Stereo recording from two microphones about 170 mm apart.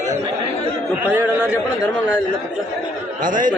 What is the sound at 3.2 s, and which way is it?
Speech, 50° right (ahead or behind).